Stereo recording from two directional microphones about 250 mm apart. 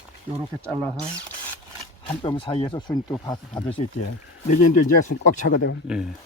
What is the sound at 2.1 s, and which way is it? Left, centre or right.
Speech, centre.